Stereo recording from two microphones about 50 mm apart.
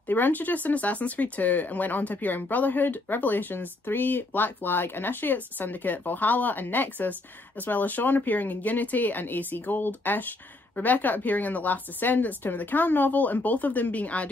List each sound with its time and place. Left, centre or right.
0.1 s speech: left